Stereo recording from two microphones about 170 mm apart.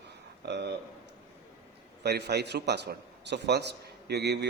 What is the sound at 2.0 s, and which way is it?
A man's voice, 75° right (ahead or behind).